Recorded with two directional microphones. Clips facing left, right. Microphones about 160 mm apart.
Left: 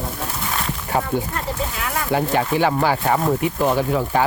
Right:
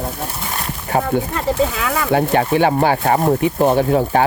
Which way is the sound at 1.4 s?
90° right.